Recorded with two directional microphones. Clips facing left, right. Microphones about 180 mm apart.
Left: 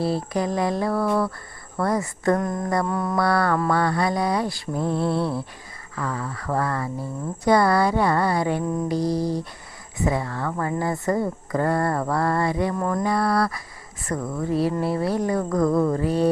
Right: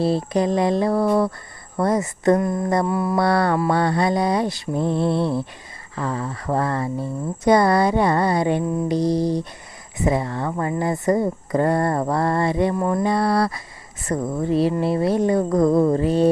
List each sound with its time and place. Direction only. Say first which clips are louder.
0.0 s speech: right 4 dB; 25° right (ahead or behind)
2.4 s a sound: right 3 dB; 5° right (ahead or behind)
3.2 s speech: right 2 dB; 25° right (ahead or behind)